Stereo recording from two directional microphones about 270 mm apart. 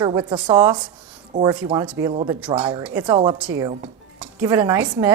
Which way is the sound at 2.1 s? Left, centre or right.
Right.